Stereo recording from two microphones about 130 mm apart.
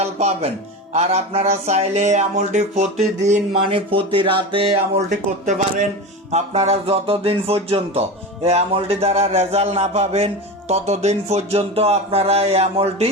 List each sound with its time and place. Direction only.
0.0 s music: 55° right (ahead or behind)
0.9 s speech: 55° right (ahead or behind)
3.6 s a man's voice: 45° right (ahead or behind)
5.1 s speech: 70° right (ahead or behind)
6.3 s a man's voice: 55° right (ahead or behind)